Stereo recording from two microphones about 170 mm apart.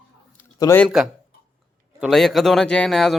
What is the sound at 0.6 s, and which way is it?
Speech, 15° left (ahead or behind).